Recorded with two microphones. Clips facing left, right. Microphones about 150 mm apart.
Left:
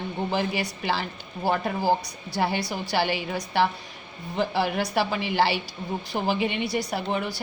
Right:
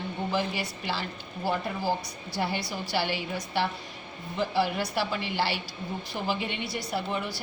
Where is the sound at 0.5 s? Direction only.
80° left.